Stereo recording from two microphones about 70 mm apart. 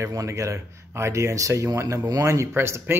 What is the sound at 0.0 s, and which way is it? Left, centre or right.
Speech, right.